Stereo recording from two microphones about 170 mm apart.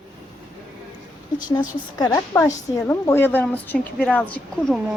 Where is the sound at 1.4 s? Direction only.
25° left (ahead or behind).